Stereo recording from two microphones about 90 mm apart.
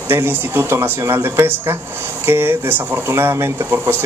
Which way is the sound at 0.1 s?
25° right (ahead or behind).